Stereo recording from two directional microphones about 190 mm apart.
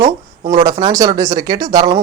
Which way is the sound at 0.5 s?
20° right (ahead or behind).